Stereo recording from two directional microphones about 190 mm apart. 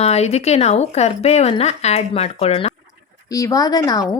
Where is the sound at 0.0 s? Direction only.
35° left (ahead or behind).